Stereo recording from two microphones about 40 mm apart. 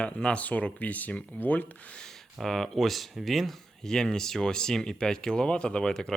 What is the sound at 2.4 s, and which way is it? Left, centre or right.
Speech, centre.